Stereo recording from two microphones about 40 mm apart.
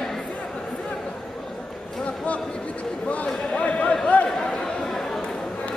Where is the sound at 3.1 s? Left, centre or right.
Left.